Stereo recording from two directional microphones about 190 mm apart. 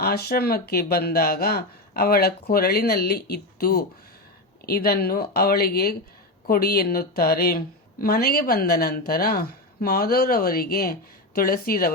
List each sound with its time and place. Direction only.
0.0 s a woman's voice: 55° left (ahead or behind)